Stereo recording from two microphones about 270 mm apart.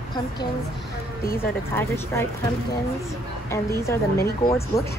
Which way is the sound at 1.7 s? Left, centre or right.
Centre.